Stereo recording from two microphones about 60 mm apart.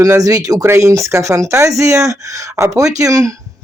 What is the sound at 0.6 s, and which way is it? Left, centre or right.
Speech, right.